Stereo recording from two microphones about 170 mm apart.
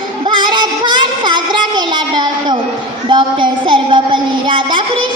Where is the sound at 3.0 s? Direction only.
30° right (ahead or behind).